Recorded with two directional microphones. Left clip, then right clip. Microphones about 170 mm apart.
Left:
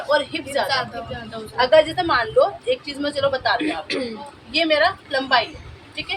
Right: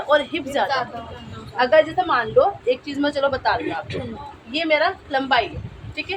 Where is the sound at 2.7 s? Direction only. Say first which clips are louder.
Right 1 dB; 50° right (ahead or behind).